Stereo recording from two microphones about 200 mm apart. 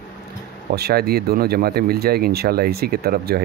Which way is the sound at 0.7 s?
50° right (ahead or behind).